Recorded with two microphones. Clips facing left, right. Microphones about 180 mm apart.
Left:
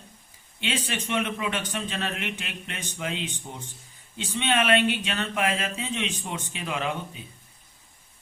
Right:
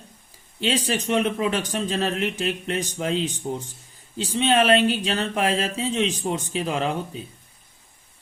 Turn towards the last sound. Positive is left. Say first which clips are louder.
# right 5 dB
turn(degrees=-35)  # may be behind; listen again after turning